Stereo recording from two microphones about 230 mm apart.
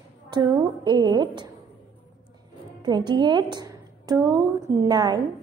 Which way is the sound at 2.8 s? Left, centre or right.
Centre.